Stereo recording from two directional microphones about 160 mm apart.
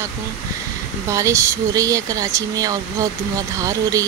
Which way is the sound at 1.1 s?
20° right (ahead or behind).